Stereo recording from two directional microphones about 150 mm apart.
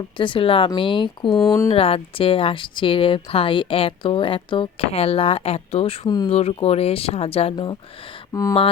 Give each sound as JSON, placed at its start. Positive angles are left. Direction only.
{"t": 0.2, "sound": "speech", "side_deg": 35}
{"t": 1.7, "sound": "speech", "side_deg": 40}
{"t": 6.1, "sound": "speech", "side_deg": 30}
{"t": 6.3, "sound": "speech", "side_deg": 40}
{"t": 8.3, "sound": "speech", "side_deg": 20}